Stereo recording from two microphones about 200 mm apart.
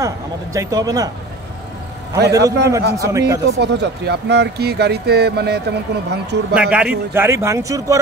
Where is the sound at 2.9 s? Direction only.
15° right (ahead or behind).